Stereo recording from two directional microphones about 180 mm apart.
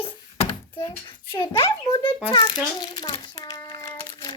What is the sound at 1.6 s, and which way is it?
Speech, 25° left (ahead or behind).